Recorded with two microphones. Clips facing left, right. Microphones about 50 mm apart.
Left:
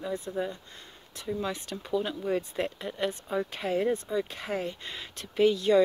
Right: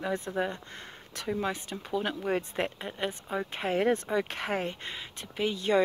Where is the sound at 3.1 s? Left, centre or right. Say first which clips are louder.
Left 2 dB; right.